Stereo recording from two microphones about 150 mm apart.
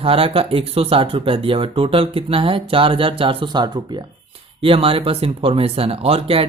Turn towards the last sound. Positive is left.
turn(degrees=-40)  # may be behind; listen again after turning